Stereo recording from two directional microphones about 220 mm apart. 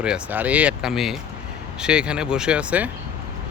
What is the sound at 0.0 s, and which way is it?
Speech, 5° right (ahead or behind).